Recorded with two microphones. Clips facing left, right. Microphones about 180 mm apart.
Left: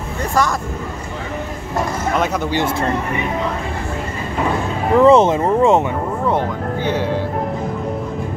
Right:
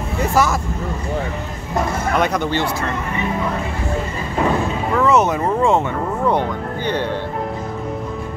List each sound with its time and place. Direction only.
0.2 s speech: 5° right (ahead or behind)
2.2 s speech: 5° left (ahead or behind)
4.9 s speech: 30° left (ahead or behind)
6.2 s speech: 5° left (ahead or behind)